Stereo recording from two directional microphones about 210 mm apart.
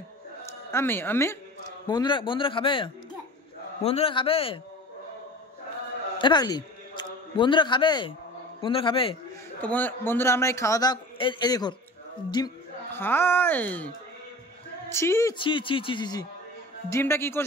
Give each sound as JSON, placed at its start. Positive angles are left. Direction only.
{"t": 0.7, "sound": "a man's voice", "side_deg": 10}
{"t": 6.1, "sound": "a man's voice", "side_deg": 20}
{"t": 9.6, "sound": "a man's voice", "side_deg": 5}